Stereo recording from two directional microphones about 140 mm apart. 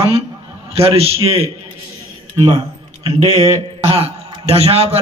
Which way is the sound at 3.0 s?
45° right (ahead or behind).